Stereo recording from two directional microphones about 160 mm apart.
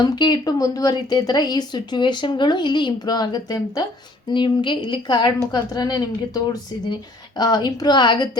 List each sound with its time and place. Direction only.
0.0 s speech: 25° left (ahead or behind)